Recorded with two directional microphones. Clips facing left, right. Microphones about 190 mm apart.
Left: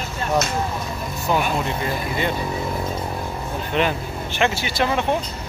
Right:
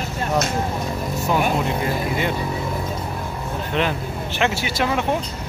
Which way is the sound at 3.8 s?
5° left (ahead or behind).